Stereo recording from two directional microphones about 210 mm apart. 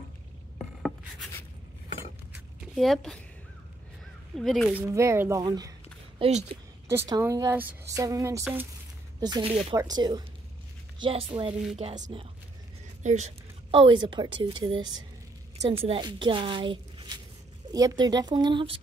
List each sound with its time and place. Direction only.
2.7 s speech: centre (ahead or behind)
4.4 s speech: centre (ahead or behind)
4.9 s speech: 10° right (ahead or behind)
6.2 s a woman's voice: 30° right (ahead or behind)
6.9 s a woman's voice: 10° right (ahead or behind)